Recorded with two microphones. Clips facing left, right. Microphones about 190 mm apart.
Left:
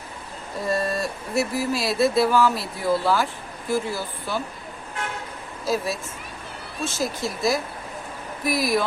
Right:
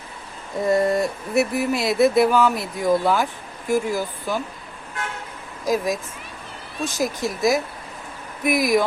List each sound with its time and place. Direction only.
0.6 s speech: 20° right (ahead or behind)
5.6 s speech: 15° right (ahead or behind)